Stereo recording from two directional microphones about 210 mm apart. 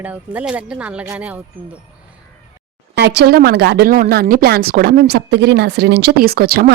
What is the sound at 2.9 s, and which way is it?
A woman's voice, 50° right (ahead or behind).